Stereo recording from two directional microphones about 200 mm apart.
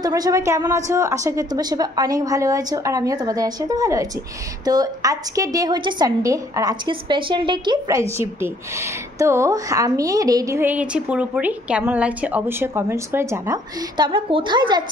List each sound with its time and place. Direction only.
0.0 s a woman's voice: 20° right (ahead or behind)